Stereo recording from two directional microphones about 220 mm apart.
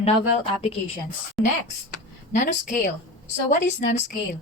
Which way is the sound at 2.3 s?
35° left (ahead or behind).